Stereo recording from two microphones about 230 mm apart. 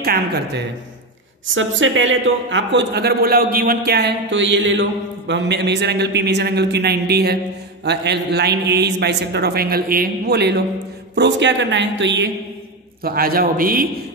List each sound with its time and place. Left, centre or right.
0.0 s a man's voice: right